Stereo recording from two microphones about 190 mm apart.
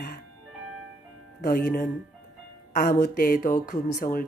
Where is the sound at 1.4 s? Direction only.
45° left (ahead or behind).